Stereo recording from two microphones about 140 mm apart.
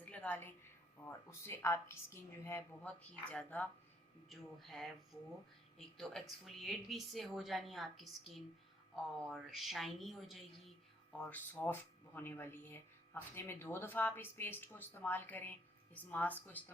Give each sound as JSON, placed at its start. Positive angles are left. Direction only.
{"t": 0.0, "sound": "a woman's voice", "side_deg": 10}
{"t": 9.2, "sound": "a woman's voice", "side_deg": 0}
{"t": 11.2, "sound": "speech", "side_deg": 10}